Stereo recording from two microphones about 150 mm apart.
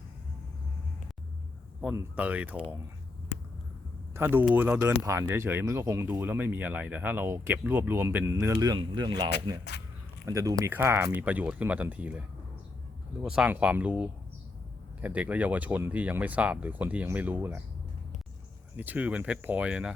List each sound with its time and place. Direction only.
1.8 s speech: 10° right (ahead or behind)
4.1 s speech: 15° right (ahead or behind)
10.7 s speech: 10° right (ahead or behind)
13.2 s speech: 5° right (ahead or behind)
18.8 s speech: 10° right (ahead or behind)